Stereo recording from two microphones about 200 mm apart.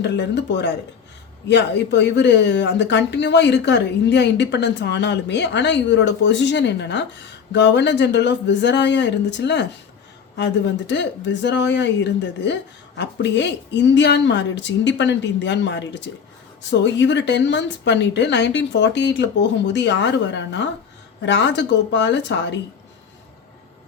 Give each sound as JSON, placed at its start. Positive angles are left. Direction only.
{"t": 0.0, "sound": "speech", "side_deg": 60}